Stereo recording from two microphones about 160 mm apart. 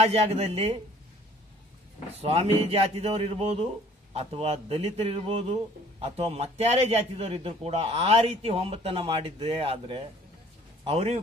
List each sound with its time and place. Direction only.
0.0 s a man's voice: 40° right (ahead or behind)
2.1 s a man's voice: 40° right (ahead or behind)